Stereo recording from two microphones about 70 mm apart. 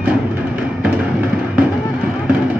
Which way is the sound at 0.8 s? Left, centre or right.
Centre.